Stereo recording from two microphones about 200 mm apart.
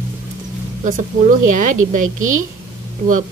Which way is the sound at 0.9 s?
40° right (ahead or behind).